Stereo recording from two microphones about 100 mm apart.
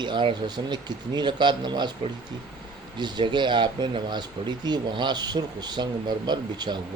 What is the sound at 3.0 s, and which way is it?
Speech, 50° right (ahead or behind).